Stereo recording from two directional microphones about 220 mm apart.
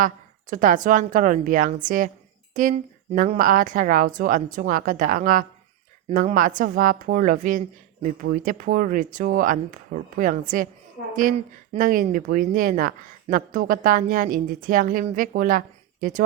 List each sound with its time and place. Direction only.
0.5 s speech: 35° right (ahead or behind)